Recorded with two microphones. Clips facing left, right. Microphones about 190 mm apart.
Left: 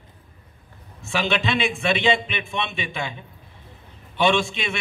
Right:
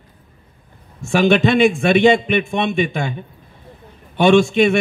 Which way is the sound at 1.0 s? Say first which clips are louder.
Right 10 dB; 50° right (ahead or behind).